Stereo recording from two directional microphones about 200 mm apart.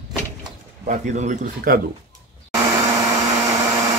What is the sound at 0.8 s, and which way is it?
Speech, 35° right (ahead or behind).